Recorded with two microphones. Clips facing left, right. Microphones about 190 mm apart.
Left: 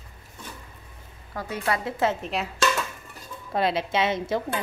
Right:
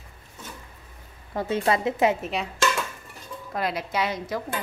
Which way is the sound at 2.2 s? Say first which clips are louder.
Even; centre (ahead or behind).